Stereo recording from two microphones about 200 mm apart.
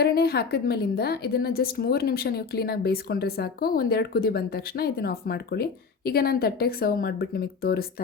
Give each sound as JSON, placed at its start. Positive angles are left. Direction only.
{"t": 0.0, "sound": "a woman's voice", "side_deg": 55}